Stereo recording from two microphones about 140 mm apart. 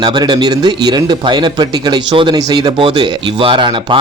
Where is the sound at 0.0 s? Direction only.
30° right (ahead or behind).